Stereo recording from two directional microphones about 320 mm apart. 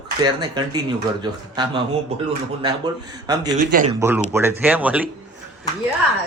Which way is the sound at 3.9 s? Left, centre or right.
Centre.